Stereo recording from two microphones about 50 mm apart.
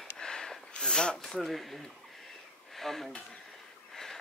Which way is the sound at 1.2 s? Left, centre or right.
Centre.